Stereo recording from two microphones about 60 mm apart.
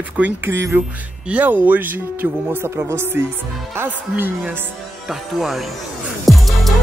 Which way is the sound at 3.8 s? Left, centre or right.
Right.